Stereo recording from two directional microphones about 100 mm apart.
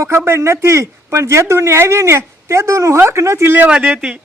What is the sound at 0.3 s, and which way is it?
Speech, 25° right (ahead or behind).